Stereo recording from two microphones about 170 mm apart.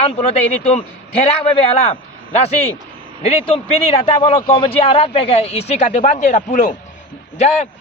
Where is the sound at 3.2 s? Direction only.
35° left (ahead or behind).